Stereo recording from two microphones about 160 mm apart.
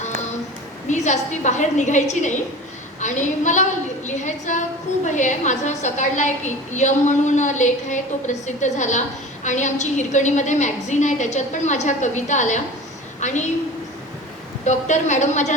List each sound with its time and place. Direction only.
0.9 s a woman's voice: 45° left (ahead or behind)
14.6 s a woman's voice: 50° left (ahead or behind)